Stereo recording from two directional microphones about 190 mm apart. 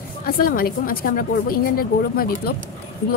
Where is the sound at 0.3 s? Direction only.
55° left (ahead or behind).